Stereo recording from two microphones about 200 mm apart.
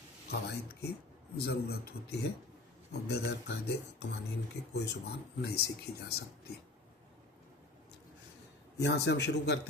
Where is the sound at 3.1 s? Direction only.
55° left (ahead or behind).